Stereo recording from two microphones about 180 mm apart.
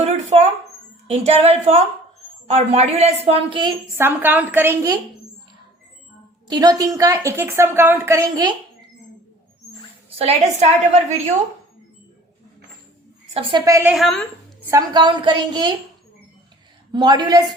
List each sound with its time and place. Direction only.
0.0 s a sound: 40° right (ahead or behind)
1.0 s a woman's voice: 35° right (ahead or behind)
3.9 s a woman's voice: 10° right (ahead or behind)
6.5 s a woman's voice: 20° right (ahead or behind)
10.2 s a woman's voice: 35° right (ahead or behind)
13.3 s a woman's voice: 30° right (ahead or behind)
13.7 s a woman's voice: 15° right (ahead or behind)
13.9 s a woman's voice: centre (ahead or behind)
14.7 s a woman's voice: 20° right (ahead or behind)
16.9 s a woman's voice: 25° right (ahead or behind)